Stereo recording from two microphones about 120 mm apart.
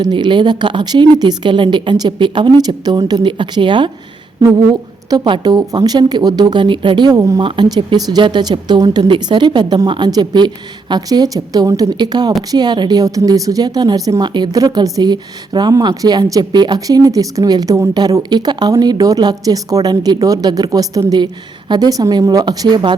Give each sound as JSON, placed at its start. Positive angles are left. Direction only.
{"t": 0.0, "sound": "a woman's voice", "side_deg": -40}